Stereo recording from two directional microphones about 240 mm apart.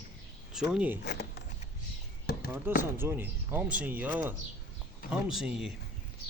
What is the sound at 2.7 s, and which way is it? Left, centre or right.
Speech, centre.